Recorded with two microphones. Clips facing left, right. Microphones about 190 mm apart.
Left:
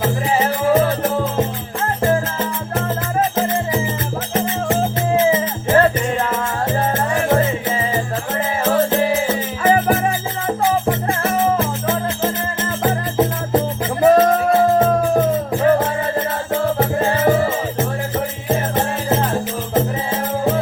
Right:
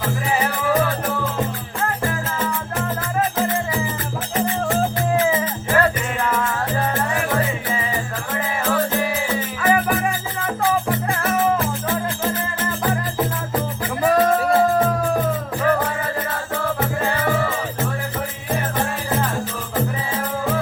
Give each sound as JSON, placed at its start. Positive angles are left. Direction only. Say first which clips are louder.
{"t": 0.3, "sound": "music", "louder": "left 4 dB", "side_deg": 20}
{"t": 17.0, "sound": "music", "louder": "left 6 dB", "side_deg": 25}